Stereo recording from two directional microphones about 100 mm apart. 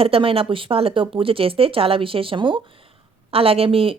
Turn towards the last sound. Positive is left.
turn(degrees=-70)  # may be behind; listen again after turning